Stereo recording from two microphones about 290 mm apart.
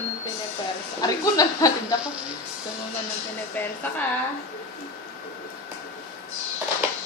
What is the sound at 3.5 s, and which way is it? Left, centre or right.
Speech, centre.